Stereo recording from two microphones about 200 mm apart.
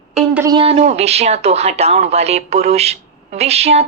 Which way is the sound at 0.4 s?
25° right (ahead or behind).